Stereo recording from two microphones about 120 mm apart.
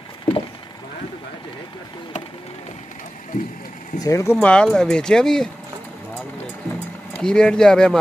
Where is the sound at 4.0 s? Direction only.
25° left (ahead or behind).